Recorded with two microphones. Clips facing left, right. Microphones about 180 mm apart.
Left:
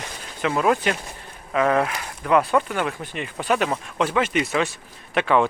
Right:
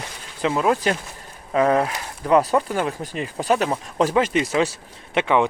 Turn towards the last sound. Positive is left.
turn(degrees=-20)  # may be behind; listen again after turning